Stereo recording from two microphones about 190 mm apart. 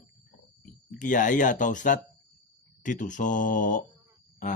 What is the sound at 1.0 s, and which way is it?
Speech, 40° left (ahead or behind).